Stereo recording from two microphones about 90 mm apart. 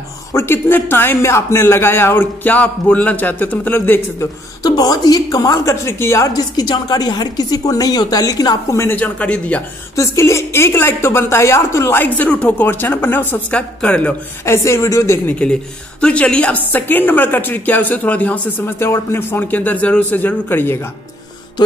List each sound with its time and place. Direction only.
0.3 s a man's voice: 25° left (ahead or behind)
4.6 s a woman's voice: 45° left (ahead or behind)
5.9 s a woman's voice: 30° left (ahead or behind); by 8.7 s 45° left (ahead or behind)
8.7 s a man's voice: 25° left (ahead or behind)
9.9 s a man's voice: 35° left (ahead or behind)
13.5 s a woman's voice: 10° left (ahead or behind)
14.4 s speech: 30° left (ahead or behind)
15.2 s a woman's voice: 15° left (ahead or behind)
18.8 s a man's voice: 25° left (ahead or behind)